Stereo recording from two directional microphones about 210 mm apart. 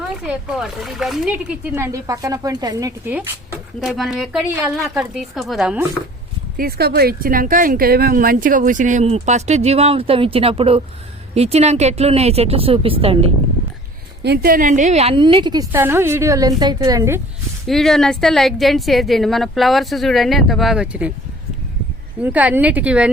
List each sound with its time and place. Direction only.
0.0 s speech: centre (ahead or behind); by 2.9 s 20° right (ahead or behind)
3.8 s a woman's voice: centre (ahead or behind)
6.6 s speech: 45° right (ahead or behind); by 13.3 s 25° right (ahead or behind)
14.3 s speech: 45° right (ahead or behind); by 15.6 s 20° right (ahead or behind)
15.7 s speech: 10° right (ahead or behind)
17.7 s a woman's voice: centre (ahead or behind)
22.2 s speech: 5° right (ahead or behind)